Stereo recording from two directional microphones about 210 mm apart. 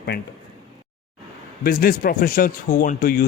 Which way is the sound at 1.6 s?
45° left (ahead or behind).